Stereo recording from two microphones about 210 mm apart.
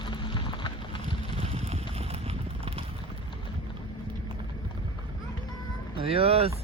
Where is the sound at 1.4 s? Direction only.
30° right (ahead or behind).